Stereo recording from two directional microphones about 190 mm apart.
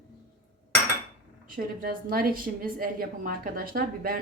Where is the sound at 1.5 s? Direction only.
50° right (ahead or behind).